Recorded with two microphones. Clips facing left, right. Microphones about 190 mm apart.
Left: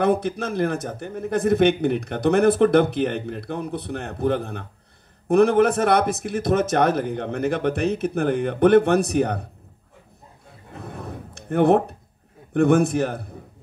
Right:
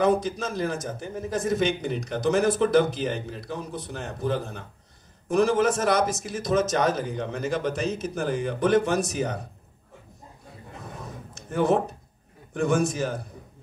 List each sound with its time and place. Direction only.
0.0 s speech: 60° left (ahead or behind)
10.8 s a sound: 60° left (ahead or behind)
12.5 s speech: 60° left (ahead or behind)